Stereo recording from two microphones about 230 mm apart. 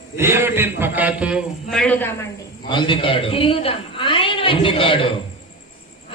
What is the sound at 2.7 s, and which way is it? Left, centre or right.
A man's voice, centre.